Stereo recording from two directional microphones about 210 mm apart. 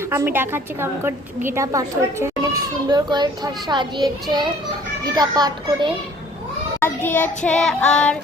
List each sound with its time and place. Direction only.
0.1 s a woman's voice: 10° right (ahead or behind)
5.0 s a child's voice: 20° right (ahead or behind)
6.7 s child singing: 10° left (ahead or behind)